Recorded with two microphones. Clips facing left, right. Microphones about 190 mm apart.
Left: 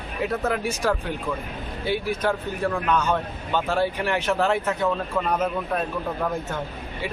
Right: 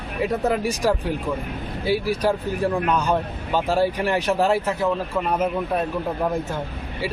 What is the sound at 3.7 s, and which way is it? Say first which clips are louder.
Speech: right 4 dB; 40° right (ahead or behind).